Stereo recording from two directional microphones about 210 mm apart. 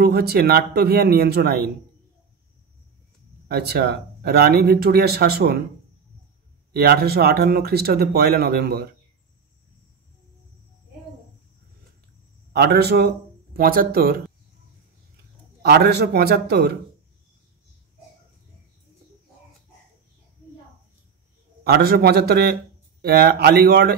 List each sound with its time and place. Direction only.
0.0 s speech: 50° right (ahead or behind)
3.4 s speech: 50° right (ahead or behind)
6.7 s speech: 50° right (ahead or behind)
12.5 s speech: 50° right (ahead or behind)
15.6 s speech: 50° right (ahead or behind)
21.6 s speech: 50° right (ahead or behind)